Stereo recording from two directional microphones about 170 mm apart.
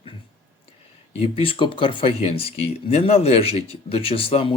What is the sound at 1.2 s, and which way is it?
Speech, 30° left (ahead or behind).